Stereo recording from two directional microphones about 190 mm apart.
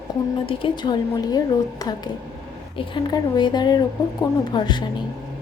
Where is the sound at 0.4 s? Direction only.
25° left (ahead or behind).